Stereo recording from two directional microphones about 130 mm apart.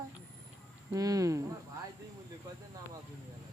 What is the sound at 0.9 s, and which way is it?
Speech, 25° right (ahead or behind).